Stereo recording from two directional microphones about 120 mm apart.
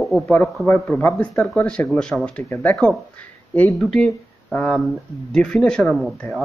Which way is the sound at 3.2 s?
15° left (ahead or behind).